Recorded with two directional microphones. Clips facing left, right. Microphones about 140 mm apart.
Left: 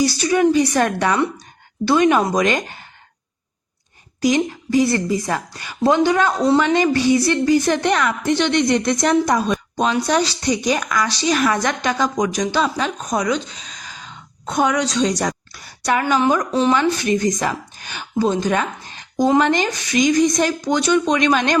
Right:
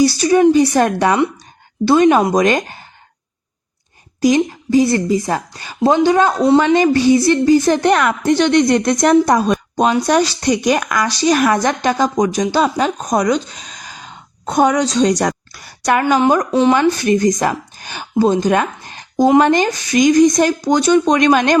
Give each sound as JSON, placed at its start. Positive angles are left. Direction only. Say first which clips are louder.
{"t": 0.0, "sound": "a woman's voice", "louder": "right 5 dB", "side_deg": -35}
{"t": 4.2, "sound": "a woman's voice", "louder": "right 4 dB", "side_deg": -35}
{"t": 16.1, "sound": "a woman's voice", "louder": "right 3 dB", "side_deg": -35}